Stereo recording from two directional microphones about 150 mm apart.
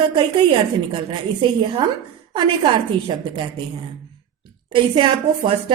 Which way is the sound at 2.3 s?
35° right (ahead or behind).